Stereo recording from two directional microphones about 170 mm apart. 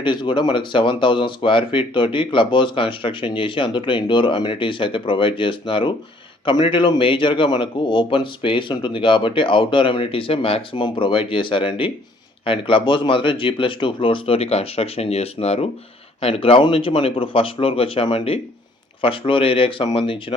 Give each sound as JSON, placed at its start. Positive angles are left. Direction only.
{"t": 0.0, "sound": "speech", "side_deg": 30}